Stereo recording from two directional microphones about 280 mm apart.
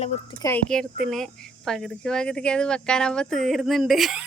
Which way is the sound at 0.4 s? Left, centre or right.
Centre.